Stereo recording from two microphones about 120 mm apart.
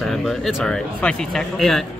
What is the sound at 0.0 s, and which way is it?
Speech, centre (ahead or behind).